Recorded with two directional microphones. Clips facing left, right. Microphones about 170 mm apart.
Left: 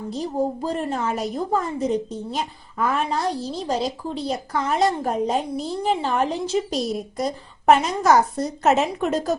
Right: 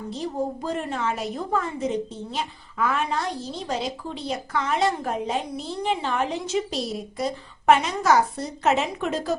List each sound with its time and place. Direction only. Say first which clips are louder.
0.1 s a woman's voice: left 4 dB; 40° left (ahead or behind)